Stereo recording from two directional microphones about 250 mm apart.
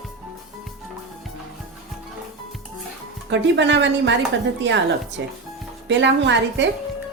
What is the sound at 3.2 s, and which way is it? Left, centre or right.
A woman's voice, right.